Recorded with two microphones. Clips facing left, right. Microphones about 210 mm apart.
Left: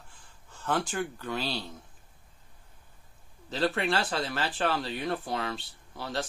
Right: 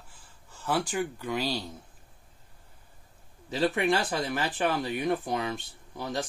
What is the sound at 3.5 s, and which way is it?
Speech, 15° right (ahead or behind).